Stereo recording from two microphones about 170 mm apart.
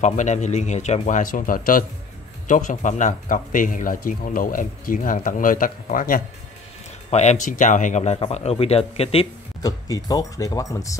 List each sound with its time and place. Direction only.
0.0 s speech: 45° left (ahead or behind)
7.1 s speech: 40° left (ahead or behind)
9.6 s speech: 20° left (ahead or behind)